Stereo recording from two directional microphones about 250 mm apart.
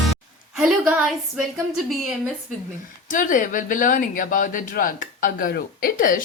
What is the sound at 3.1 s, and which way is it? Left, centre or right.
Speech, left.